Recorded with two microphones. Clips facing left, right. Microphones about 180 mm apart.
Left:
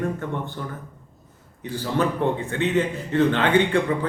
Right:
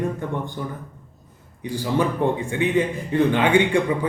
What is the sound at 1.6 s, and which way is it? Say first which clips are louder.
A man's voice: right 2 dB; 15° right (ahead or behind).